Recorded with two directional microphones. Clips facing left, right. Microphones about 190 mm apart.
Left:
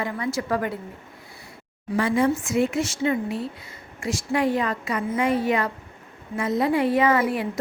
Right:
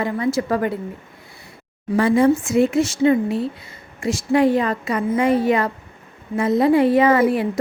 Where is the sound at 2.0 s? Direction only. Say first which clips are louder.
Right 6 dB; 35° right (ahead or behind).